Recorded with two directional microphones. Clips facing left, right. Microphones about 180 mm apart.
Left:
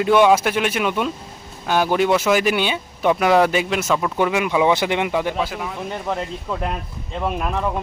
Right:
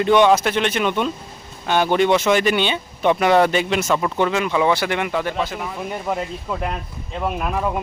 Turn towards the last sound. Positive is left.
turn(degrees=-5)  # may be behind; listen again after turning